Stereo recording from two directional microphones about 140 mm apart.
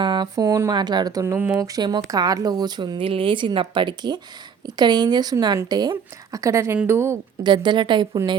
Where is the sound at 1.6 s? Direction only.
25° right (ahead or behind).